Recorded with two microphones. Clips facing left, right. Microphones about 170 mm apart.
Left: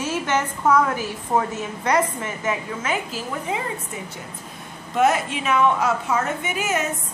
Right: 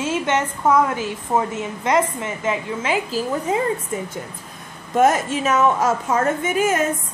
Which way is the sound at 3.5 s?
40° right (ahead or behind).